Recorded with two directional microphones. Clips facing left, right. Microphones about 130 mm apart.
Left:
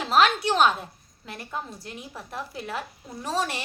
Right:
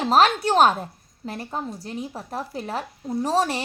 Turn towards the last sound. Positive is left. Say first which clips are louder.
# right 6 dB
turn(degrees=-35)  # may be behind; listen again after turning